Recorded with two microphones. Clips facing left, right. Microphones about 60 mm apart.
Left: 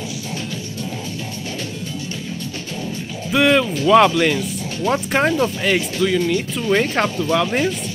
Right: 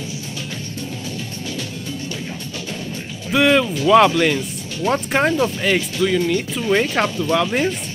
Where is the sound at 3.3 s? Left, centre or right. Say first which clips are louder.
Even; centre.